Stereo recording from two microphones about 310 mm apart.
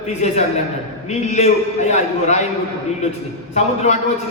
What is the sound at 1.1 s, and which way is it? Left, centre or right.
A man's voice, left.